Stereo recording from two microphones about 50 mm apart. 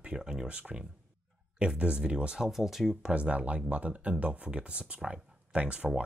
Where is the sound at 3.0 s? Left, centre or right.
Right.